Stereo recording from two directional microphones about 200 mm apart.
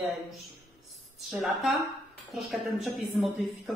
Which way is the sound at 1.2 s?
Centre (ahead or behind).